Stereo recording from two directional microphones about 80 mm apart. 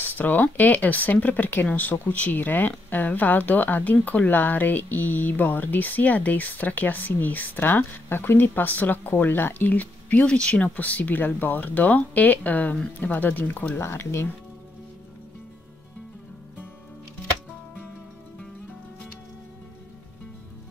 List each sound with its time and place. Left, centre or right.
0.0 s speech: left
13.7 s speech: left